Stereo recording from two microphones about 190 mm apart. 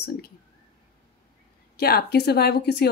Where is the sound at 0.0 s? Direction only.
55° left (ahead or behind).